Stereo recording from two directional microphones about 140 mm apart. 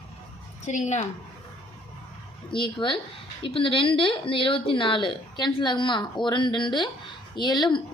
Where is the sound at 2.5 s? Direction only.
35° left (ahead or behind).